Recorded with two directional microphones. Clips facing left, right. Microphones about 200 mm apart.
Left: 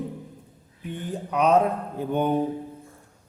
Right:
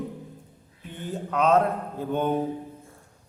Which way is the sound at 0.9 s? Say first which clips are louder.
Left 1 dB; 15° left (ahead or behind).